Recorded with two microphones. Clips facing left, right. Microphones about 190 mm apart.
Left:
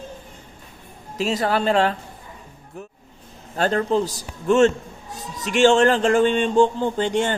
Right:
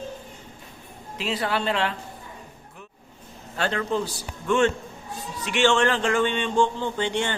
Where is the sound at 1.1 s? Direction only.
45° left (ahead or behind).